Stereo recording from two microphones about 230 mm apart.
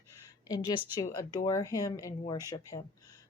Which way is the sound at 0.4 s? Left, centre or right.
Centre.